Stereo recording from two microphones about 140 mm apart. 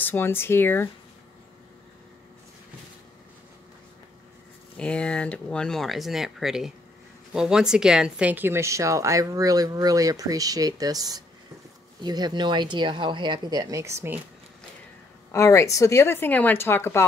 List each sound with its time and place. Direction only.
0.0 s speech: 15° left (ahead or behind)
4.7 s speech: 5° left (ahead or behind); by 14.2 s 20° right (ahead or behind)
15.3 s speech: 20° left (ahead or behind)